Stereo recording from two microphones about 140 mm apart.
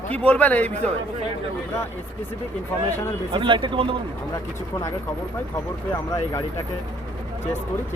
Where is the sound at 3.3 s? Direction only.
35° right (ahead or behind).